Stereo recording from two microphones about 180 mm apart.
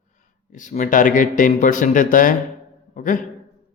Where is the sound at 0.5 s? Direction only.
45° left (ahead or behind).